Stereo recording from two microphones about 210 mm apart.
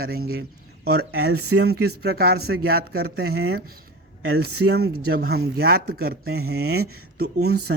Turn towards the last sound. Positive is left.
turn(degrees=-50)  # may be behind; listen again after turning